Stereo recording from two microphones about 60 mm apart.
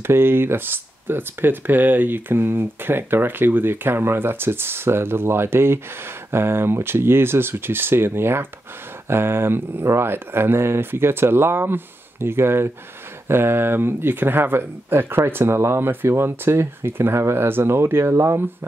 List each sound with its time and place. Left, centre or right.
0.0 s speech: right